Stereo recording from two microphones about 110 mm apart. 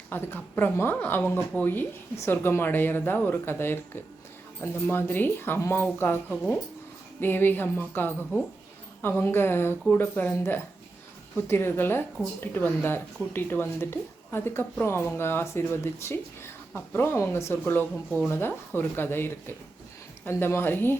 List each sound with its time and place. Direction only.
0.1 s speech: 20° left (ahead or behind)